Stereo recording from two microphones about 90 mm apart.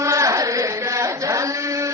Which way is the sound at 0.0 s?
35° right (ahead or behind).